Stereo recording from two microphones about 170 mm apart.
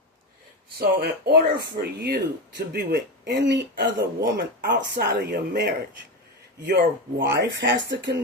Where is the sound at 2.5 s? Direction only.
75° right (ahead or behind).